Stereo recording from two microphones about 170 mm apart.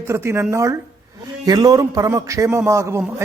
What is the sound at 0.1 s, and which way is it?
A man's voice, 15° right (ahead or behind).